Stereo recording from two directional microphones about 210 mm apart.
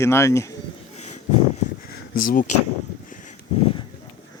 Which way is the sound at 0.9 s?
35° left (ahead or behind).